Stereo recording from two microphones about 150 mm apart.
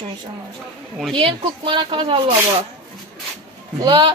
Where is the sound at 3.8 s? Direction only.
30° right (ahead or behind).